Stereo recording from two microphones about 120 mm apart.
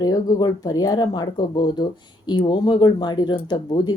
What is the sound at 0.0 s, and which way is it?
Speech, 35° left (ahead or behind).